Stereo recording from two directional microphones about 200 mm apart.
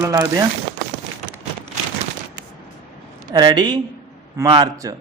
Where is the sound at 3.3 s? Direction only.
20° right (ahead or behind).